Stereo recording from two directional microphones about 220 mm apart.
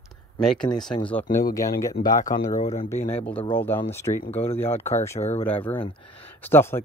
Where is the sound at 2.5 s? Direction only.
30° left (ahead or behind).